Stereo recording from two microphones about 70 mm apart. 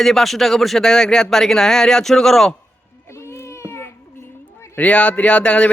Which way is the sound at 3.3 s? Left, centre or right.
Left.